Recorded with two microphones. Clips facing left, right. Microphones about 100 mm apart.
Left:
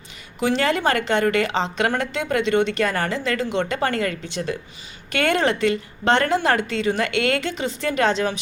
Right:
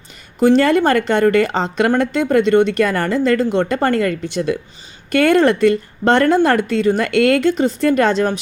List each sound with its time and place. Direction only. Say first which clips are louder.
0.3 s a woman's voice: right 9 dB; 45° right (ahead or behind)